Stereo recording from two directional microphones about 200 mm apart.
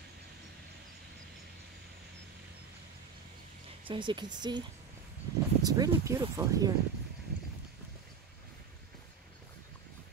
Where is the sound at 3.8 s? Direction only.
25° right (ahead or behind).